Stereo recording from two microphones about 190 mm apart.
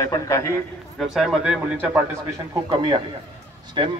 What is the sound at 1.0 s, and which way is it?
A man's voice, centre (ahead or behind).